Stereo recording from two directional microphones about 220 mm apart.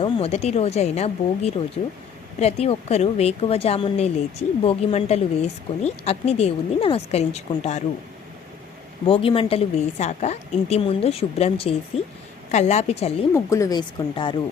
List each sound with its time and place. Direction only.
0.0 s speech: 30° left (ahead or behind)
9.0 s a woman's voice: 25° left (ahead or behind)
13.3 s speech: 15° left (ahead or behind)